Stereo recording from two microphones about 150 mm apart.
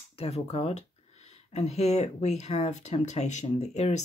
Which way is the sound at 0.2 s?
45° left (ahead or behind).